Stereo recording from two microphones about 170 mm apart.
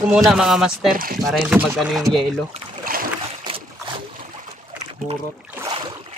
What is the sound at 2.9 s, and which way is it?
Boat, 55° right (ahead or behind).